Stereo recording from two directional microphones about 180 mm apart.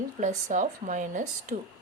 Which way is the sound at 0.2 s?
45° right (ahead or behind).